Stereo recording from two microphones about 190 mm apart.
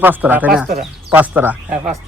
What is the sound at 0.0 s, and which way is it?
A man's voice, 10° right (ahead or behind).